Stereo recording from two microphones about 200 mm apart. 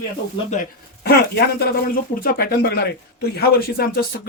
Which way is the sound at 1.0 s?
50° left (ahead or behind).